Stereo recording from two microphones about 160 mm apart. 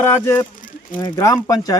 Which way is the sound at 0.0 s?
15° left (ahead or behind).